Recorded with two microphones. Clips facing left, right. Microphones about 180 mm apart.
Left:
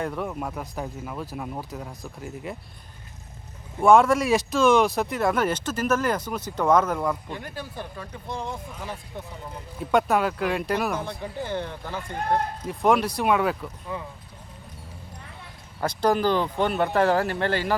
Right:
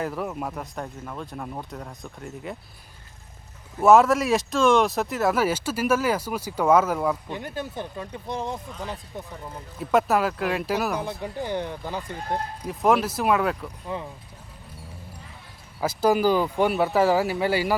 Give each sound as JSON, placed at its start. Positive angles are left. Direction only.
{"t": 0.0, "sound": "speech", "side_deg": -5}
{"t": 3.8, "sound": "speech", "side_deg": -5}
{"t": 7.3, "sound": "speech", "side_deg": -20}
{"t": 9.8, "sound": "speech", "side_deg": 0}
{"t": 12.6, "sound": "speech", "side_deg": 0}
{"t": 13.9, "sound": "speech", "side_deg": -25}
{"t": 15.8, "sound": "speech", "side_deg": -5}